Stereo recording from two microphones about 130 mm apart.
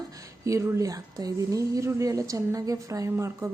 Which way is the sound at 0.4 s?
25° right (ahead or behind).